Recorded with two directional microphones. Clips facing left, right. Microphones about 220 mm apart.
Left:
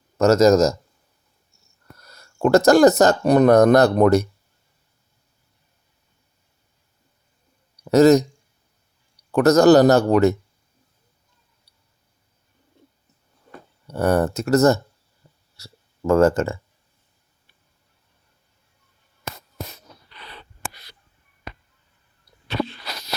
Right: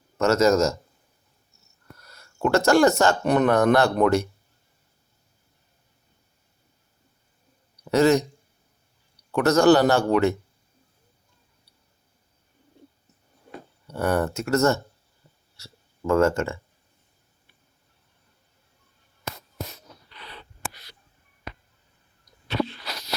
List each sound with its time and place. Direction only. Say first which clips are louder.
0.2 s speech: left 5 dB; 40° left (ahead or behind)
2.0 s a sound: left 5 dB; 40° left (ahead or behind)
3.0 s speech: left 5 dB; 40° left (ahead or behind)
7.9 s speech: left 6 dB; 40° left (ahead or behind)
9.3 s speech: left 4 dB; 40° left (ahead or behind)
13.8 s speech: left 4 dB; 40° left (ahead or behind)